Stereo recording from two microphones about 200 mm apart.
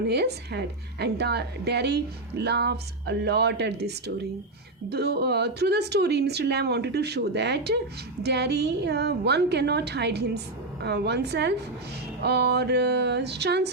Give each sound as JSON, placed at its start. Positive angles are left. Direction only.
{"t": 0.0, "sound": "a woman's voice", "side_deg": -55}